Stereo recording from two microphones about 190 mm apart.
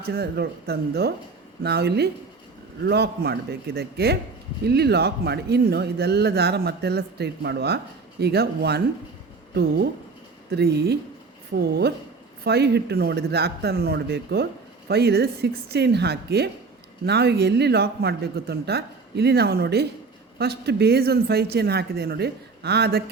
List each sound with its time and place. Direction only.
0.1 s speech: 55° right (ahead or behind)
10.5 s speech: 60° right (ahead or behind)